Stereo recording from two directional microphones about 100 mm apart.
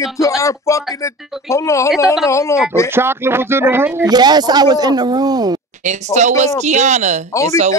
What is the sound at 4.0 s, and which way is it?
Speech, 45° right (ahead or behind).